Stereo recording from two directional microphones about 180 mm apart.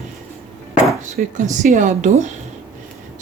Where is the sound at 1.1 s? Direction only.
45° right (ahead or behind).